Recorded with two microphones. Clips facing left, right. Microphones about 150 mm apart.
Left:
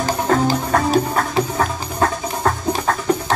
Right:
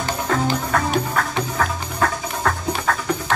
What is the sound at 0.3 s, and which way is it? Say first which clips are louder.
Music: left 3 dB; 35° left (ahead or behind).